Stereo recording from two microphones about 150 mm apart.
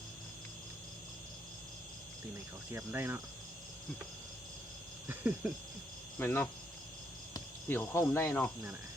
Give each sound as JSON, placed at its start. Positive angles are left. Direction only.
{"t": 2.7, "sound": "speech", "side_deg": -15}
{"t": 5.0, "sound": "speech", "side_deg": -10}
{"t": 6.1, "sound": "speech", "side_deg": 15}
{"t": 7.7, "sound": "speech", "side_deg": 15}